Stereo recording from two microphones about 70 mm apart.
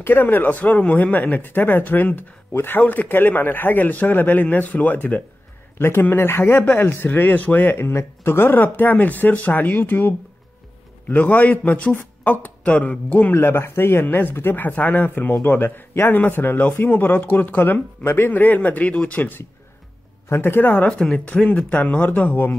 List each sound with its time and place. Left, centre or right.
0.0 s a man's voice: left
21.0 s a man's voice: centre